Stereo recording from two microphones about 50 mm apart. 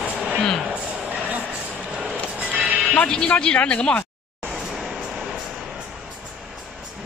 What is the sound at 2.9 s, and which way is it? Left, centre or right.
Speech, centre.